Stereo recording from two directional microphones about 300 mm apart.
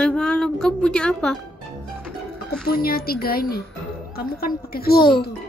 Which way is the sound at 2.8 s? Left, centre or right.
Left.